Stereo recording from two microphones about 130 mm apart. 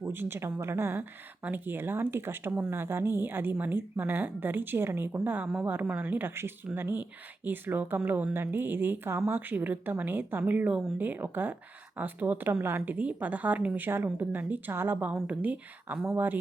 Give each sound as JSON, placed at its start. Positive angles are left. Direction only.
{"t": 0.0, "sound": "speech", "side_deg": -15}